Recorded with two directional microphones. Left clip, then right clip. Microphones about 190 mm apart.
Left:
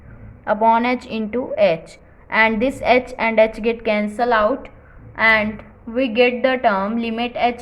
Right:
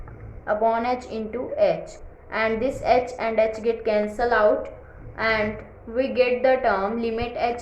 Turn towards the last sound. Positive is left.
turn(degrees=40)  # may be behind; listen again after turning